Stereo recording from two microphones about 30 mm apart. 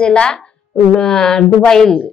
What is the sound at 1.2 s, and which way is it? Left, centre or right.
Speech, centre.